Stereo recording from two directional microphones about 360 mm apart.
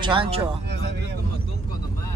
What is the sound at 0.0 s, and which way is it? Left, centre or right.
Speech, centre.